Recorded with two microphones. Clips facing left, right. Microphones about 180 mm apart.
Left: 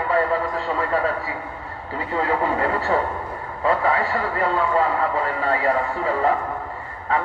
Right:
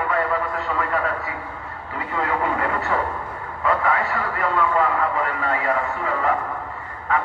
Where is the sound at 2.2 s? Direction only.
30° left (ahead or behind).